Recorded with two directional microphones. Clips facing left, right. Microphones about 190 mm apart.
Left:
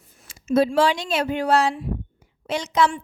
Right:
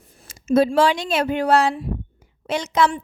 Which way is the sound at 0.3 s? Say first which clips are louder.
Right 2 dB; 45° right (ahead or behind).